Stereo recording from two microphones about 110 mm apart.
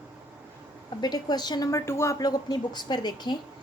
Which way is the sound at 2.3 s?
40° left (ahead or behind).